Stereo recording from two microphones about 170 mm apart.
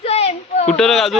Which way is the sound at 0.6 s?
5° left (ahead or behind).